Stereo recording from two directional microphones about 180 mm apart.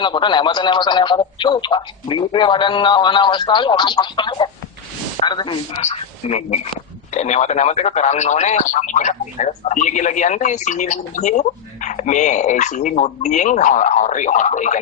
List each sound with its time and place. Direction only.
0.0 s speech: 25° left (ahead or behind)
5.8 s speech: 35° left (ahead or behind)